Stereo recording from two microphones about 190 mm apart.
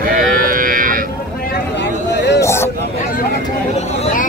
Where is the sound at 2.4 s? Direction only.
15° left (ahead or behind).